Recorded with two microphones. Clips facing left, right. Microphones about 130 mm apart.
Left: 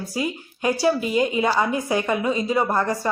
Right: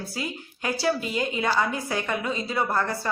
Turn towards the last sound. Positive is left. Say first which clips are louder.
# left 4 dB
turn(degrees=15)  # may be behind; listen again after turning